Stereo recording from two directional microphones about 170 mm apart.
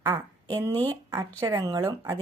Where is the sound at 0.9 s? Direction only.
20° right (ahead or behind).